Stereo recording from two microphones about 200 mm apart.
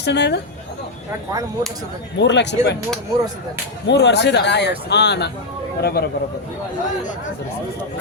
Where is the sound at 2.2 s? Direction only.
60° left (ahead or behind).